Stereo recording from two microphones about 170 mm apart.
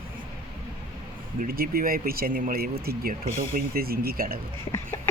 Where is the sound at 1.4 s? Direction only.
60° right (ahead or behind).